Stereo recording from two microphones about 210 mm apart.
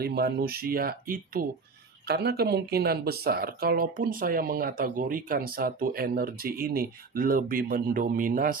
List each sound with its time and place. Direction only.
0.0 s speech: 50° right (ahead or behind)